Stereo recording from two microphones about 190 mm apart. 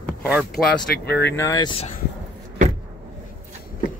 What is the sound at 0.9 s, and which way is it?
Speech, 60° left (ahead or behind).